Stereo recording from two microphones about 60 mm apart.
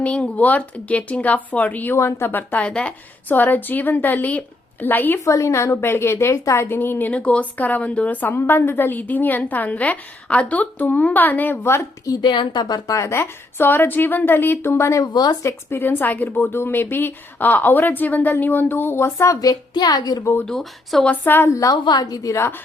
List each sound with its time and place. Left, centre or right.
0.0 s a woman's voice: left
2.0 s a woman's voice: left
2.6 s speech: centre
3.2 s a woman's voice: left
5.2 s a woman's voice: left
6.7 s a woman's voice: left
7.1 s a woman's voice: left
11.6 s a woman's voice: left
12.1 s a woman's voice: left
12.9 s a woman's voice: left
15.4 s a woman's voice: left
20.4 s speech: centre
21.2 s a woman's voice: left
21.5 s a woman's voice: left